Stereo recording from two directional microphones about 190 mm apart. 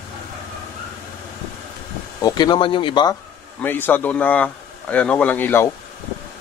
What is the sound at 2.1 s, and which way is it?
Speech, 20° left (ahead or behind).